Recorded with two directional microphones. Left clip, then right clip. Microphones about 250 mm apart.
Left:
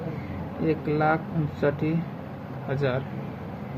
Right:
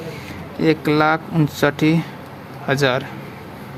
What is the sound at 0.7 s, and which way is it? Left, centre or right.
Speech, right.